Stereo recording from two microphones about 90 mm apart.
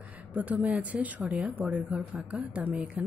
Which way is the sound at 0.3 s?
15° right (ahead or behind).